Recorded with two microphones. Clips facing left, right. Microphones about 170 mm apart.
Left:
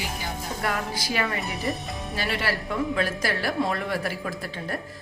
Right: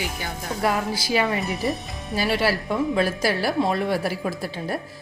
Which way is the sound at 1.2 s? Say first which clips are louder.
Right 4 dB; centre (ahead or behind).